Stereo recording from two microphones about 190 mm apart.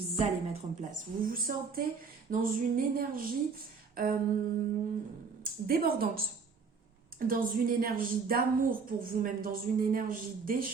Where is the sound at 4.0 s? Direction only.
50° right (ahead or behind).